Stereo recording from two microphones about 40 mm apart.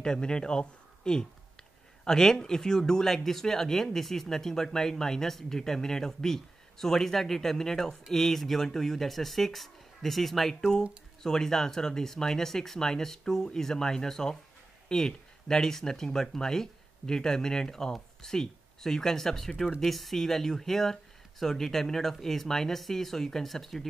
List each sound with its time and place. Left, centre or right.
0.0 s speech: centre